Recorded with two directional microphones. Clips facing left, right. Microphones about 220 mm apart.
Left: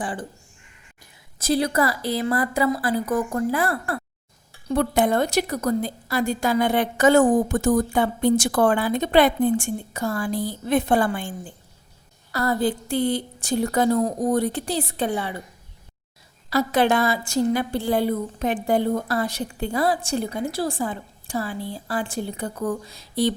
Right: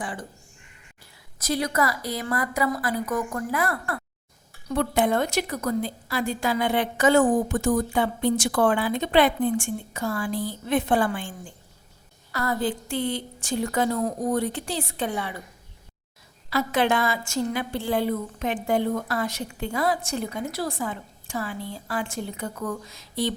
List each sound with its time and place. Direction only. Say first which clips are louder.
0.0 s a woman's voice: left 4 dB; 35° left (ahead or behind)
1.4 s a woman's voice: left 4 dB; 30° left (ahead or behind)
16.5 s a woman's voice: left 3 dB; 40° left (ahead or behind)